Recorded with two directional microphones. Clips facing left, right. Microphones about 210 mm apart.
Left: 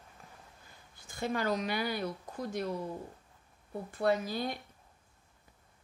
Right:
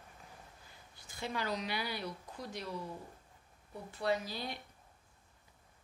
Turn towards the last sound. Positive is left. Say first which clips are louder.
# left 4 dB
turn(degrees=50)  # may be behind; listen again after turning